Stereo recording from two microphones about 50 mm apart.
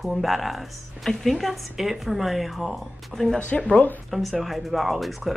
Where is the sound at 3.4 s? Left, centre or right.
Left.